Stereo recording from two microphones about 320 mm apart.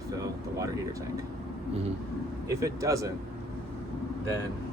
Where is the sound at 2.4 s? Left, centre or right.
Centre.